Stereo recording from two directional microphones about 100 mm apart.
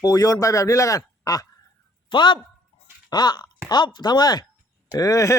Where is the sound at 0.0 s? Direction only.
40° left (ahead or behind).